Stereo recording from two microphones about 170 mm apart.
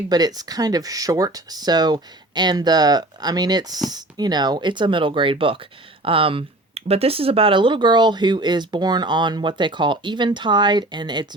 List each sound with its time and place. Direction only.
0.1 s speech: 25° right (ahead or behind)